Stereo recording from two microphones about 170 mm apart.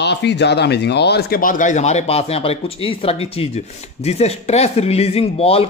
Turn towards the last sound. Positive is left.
turn(degrees=35)  # may be behind; listen again after turning